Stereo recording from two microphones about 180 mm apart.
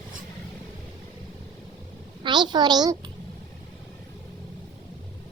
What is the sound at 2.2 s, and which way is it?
Speech, 25° right (ahead or behind).